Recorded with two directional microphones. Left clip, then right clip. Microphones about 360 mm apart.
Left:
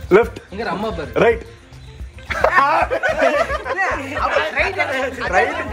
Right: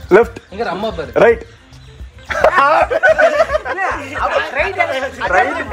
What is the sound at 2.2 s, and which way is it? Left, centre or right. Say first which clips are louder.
Music: right 4 dB; right.